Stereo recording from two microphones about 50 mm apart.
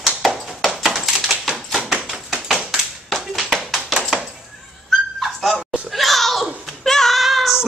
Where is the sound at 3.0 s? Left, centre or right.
Centre.